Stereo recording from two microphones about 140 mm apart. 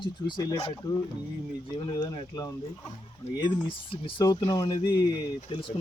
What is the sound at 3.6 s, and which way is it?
Speech, 40° left (ahead or behind).